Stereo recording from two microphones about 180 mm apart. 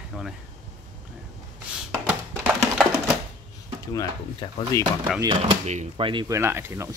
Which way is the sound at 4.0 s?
20° left (ahead or behind).